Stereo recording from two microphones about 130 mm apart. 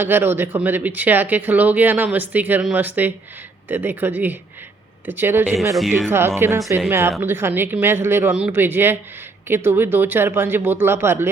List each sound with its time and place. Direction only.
0.0 s speech: 15° right (ahead or behind)